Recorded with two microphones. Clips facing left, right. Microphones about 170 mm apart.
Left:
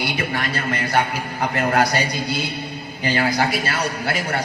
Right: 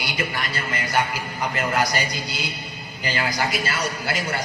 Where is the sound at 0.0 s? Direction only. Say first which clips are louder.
Left 4 dB; 60° left (ahead or behind).